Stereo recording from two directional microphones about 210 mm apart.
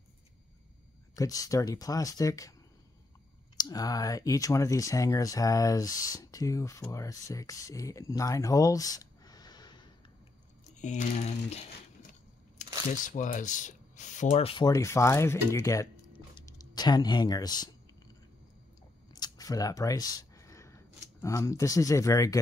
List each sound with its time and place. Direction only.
1.1 s speech: 15° left (ahead or behind)
3.5 s speech: 20° left (ahead or behind)
10.8 s crushing: 35° left (ahead or behind)
12.5 s speech: 35° left (ahead or behind); by 17.6 s 20° left (ahead or behind)
19.1 s a sound: 20° left (ahead or behind)
21.2 s speech: 15° left (ahead or behind)